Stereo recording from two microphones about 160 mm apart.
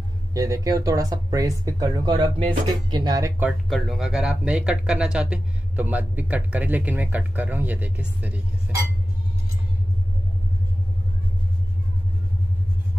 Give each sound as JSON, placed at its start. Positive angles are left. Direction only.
{"t": 0.3, "sound": "speech", "side_deg": -20}
{"t": 3.4, "sound": "speech", "side_deg": 0}